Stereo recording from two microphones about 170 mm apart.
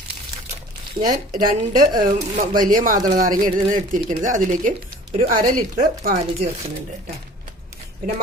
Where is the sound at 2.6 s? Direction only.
50° right (ahead or behind).